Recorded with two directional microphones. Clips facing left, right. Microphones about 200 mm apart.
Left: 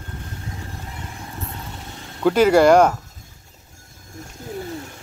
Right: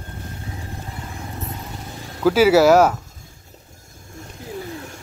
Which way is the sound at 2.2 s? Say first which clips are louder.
Even; 5° right (ahead or behind).